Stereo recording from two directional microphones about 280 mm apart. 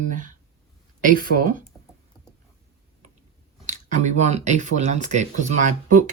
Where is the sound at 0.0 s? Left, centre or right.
Right.